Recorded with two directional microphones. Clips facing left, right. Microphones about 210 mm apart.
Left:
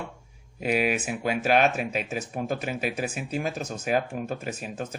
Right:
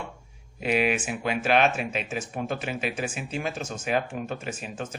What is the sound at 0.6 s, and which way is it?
Speech, 40° left (ahead or behind).